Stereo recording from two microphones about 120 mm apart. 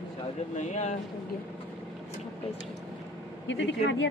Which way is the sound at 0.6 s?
80° left.